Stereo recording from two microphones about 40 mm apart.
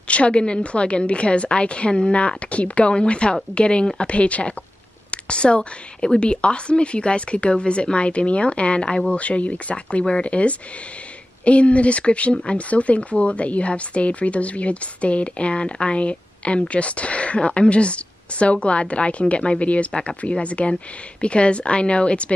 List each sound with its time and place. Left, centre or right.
0.1 s a woman's voice: left
9.2 s a woman's voice: left
19.9 s a woman's voice: centre
20.2 s a woman's voice: left